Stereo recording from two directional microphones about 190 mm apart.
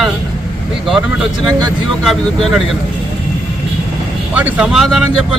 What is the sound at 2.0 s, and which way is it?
Speech, centre (ahead or behind).